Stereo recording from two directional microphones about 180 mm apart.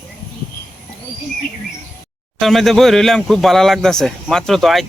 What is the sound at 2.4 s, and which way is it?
Speech, centre (ahead or behind).